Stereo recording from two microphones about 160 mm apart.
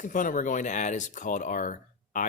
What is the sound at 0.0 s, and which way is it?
Speech, 55° left (ahead or behind).